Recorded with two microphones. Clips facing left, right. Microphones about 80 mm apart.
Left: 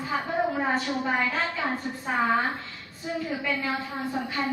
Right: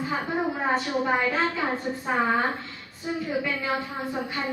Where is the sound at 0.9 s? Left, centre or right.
Centre.